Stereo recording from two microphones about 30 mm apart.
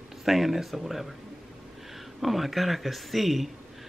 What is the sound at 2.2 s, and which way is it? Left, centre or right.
Speech, centre.